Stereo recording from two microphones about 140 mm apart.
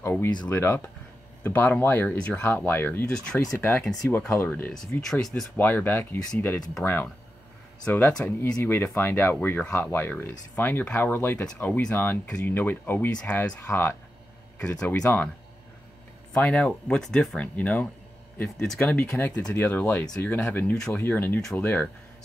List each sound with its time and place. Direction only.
0.0 s speech: 20° left (ahead or behind)
3.5 s speech: 15° left (ahead or behind)
16.3 s speech: 10° left (ahead or behind)